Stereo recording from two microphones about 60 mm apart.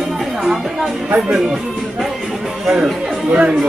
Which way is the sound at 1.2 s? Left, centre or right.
Centre.